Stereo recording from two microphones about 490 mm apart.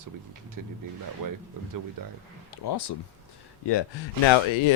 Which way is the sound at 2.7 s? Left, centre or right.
Left.